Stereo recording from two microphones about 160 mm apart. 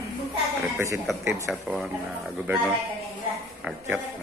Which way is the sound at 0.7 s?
15° right (ahead or behind).